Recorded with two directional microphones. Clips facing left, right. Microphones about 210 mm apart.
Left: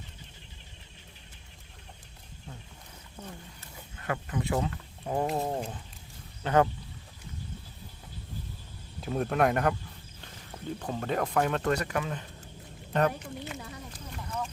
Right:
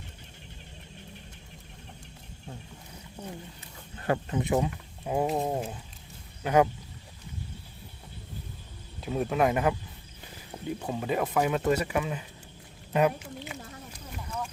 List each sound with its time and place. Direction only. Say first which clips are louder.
3.9 s speech: right 5 dB; 30° right (ahead or behind); by 6.7 s 10° right (ahead or behind)
9.0 s speech: right 1 dB; centre (ahead or behind)
14.1 s a sound: even; 5° right (ahead or behind)